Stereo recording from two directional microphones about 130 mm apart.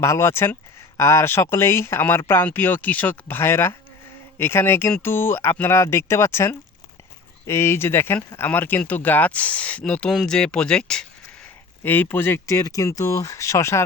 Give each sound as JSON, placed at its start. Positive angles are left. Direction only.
{"t": 0.0, "sound": "speech", "side_deg": 20}